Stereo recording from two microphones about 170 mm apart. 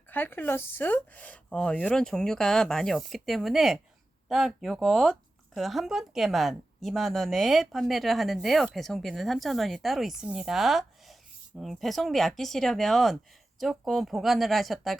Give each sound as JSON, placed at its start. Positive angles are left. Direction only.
{"t": 0.1, "sound": "speech", "side_deg": 10}